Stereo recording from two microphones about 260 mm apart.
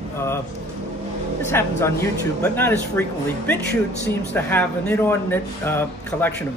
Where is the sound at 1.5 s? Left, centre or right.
Centre.